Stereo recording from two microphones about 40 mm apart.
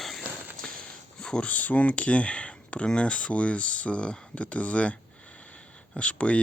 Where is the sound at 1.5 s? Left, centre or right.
Left.